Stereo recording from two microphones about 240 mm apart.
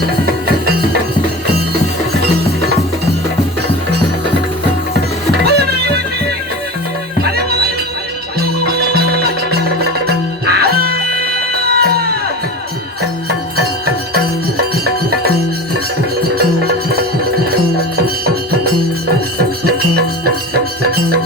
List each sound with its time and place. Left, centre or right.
5.4 s music: right
7.2 s music: right
13.2 s music: right
16.3 s music: right
20.2 s music: right